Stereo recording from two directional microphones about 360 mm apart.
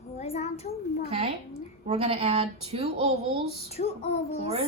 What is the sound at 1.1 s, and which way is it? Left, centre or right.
Speech, centre.